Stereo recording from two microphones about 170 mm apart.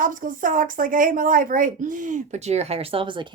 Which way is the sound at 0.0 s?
50° right (ahead or behind).